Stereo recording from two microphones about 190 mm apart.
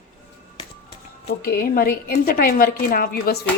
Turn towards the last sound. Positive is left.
turn(degrees=50)  # may be behind; listen again after turning